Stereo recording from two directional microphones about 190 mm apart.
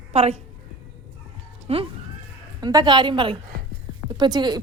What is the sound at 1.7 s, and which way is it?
A woman's voice, 30° right (ahead or behind).